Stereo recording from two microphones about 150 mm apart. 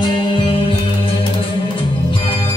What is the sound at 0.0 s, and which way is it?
Music, 30° left (ahead or behind).